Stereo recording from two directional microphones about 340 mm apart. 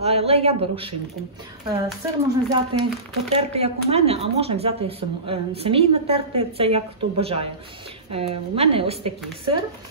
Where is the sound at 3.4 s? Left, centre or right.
Centre.